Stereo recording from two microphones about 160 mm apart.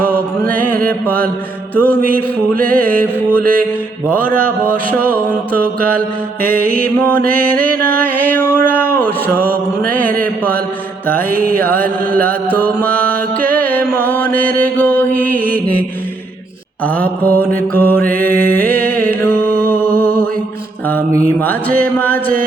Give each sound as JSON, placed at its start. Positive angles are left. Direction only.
{"t": 0.7, "sound": "mantra", "side_deg": -65}
{"t": 1.0, "sound": "music", "side_deg": 10}
{"t": 2.6, "sound": "music", "side_deg": -65}
{"t": 5.5, "sound": "music", "side_deg": -65}
{"t": 6.8, "sound": "music", "side_deg": 10}
{"t": 7.2, "sound": "music", "side_deg": -65}
{"t": 8.1, "sound": "music", "side_deg": 10}
{"t": 11.3, "sound": "music", "side_deg": -65}
{"t": 11.6, "sound": "music", "side_deg": 10}
{"t": 16.8, "sound": "music", "side_deg": 10}
{"t": 19.5, "sound": "music", "side_deg": -65}
{"t": 21.9, "sound": "music", "side_deg": 10}